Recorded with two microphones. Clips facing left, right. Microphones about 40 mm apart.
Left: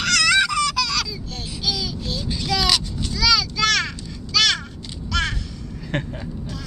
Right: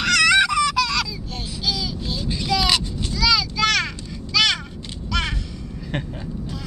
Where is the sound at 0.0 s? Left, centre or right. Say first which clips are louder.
Right 2 dB; centre.